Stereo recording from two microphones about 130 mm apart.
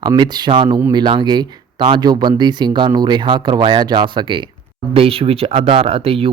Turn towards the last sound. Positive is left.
turn(degrees=-50)  # may be behind; listen again after turning